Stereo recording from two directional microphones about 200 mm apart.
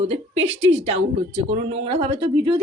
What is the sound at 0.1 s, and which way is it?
Speech, 30° right (ahead or behind).